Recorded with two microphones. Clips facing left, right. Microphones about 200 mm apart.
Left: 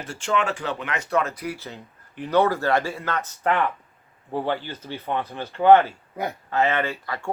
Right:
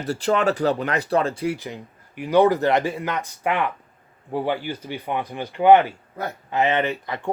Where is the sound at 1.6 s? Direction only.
15° right (ahead or behind).